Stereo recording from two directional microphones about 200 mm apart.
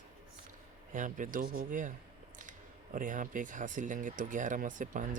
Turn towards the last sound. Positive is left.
turn(degrees=-40)  # may be behind; listen again after turning